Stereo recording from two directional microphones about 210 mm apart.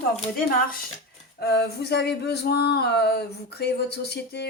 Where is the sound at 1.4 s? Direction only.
50° left (ahead or behind).